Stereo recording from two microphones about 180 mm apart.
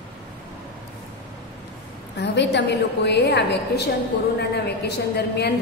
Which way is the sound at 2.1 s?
75° left (ahead or behind).